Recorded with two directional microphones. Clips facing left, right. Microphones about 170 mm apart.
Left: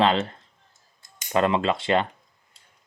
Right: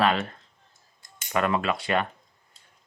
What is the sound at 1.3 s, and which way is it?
Speech, 25° left (ahead or behind).